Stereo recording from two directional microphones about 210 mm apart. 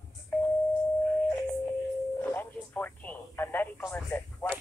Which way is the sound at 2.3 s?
10° left (ahead or behind).